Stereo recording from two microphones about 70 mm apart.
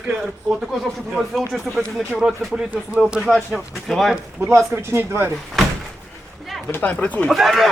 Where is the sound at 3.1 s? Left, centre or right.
Centre.